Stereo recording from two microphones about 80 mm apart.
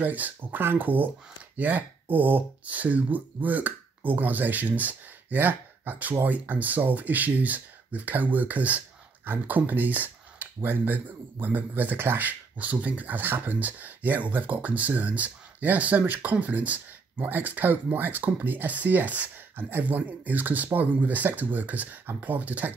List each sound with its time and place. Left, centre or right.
0.0 s speech: right